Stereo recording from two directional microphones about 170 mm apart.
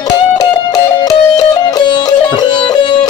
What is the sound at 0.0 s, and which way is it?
Music, 20° left (ahead or behind).